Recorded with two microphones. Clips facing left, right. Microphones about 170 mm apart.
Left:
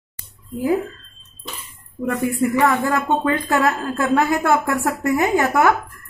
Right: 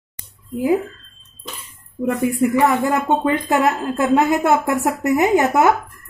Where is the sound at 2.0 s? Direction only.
20° right (ahead or behind).